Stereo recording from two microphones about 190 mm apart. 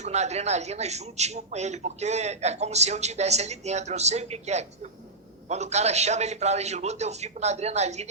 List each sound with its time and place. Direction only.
0.0 s a man's voice: 35° right (ahead or behind)